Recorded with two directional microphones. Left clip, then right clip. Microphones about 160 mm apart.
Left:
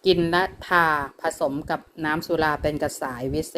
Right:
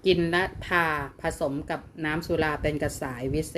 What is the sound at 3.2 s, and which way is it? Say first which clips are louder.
Speech: left 1 dB; 35° left (ahead or behind).